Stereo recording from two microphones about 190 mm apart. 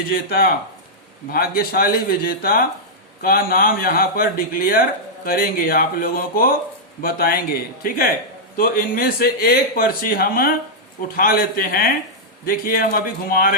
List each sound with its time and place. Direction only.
0.1 s speech: 50° left (ahead or behind)